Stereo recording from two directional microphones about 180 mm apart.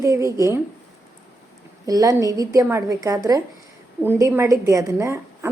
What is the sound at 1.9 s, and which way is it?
A woman's voice, 20° right (ahead or behind).